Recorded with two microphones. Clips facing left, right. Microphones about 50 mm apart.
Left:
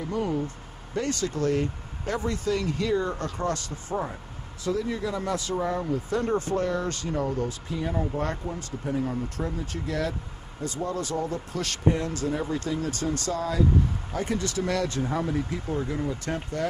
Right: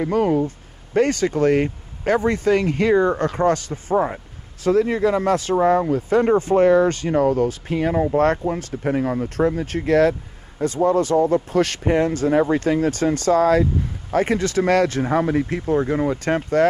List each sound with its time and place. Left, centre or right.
0.0 s speech: right
4.6 s speech: right
7.2 s speech: right
10.6 s speech: right
11.9 s speech: right